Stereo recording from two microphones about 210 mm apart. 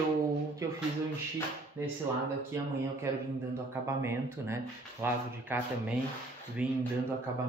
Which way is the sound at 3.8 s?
10° right (ahead or behind).